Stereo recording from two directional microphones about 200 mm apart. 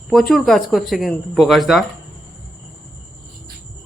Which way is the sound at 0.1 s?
Centre (ahead or behind).